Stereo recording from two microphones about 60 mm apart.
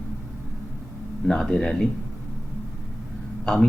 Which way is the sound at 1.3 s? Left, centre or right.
Centre.